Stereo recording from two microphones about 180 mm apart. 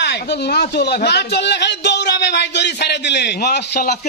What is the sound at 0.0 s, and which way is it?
A man's voice, 65° left (ahead or behind).